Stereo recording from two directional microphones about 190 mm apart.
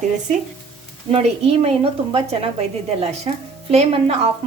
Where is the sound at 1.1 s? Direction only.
30° right (ahead or behind).